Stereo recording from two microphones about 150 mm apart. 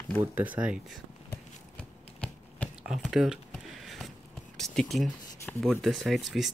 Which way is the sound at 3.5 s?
Centre (ahead or behind).